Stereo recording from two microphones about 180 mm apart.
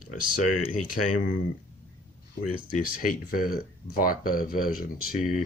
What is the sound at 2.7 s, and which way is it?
Speech, 50° left (ahead or behind).